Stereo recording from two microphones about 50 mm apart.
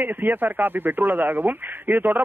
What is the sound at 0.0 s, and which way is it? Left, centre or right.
Speech, right.